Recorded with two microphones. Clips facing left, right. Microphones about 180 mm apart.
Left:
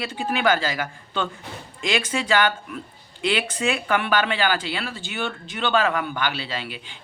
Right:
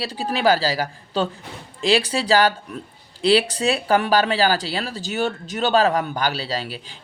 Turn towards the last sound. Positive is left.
turn(degrees=-40)  # may be behind; listen again after turning